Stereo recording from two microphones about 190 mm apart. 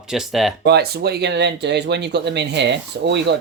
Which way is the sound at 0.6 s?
60° right (ahead or behind).